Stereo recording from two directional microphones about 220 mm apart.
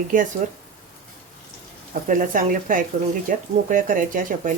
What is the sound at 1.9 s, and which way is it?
Speech, 35° right (ahead or behind).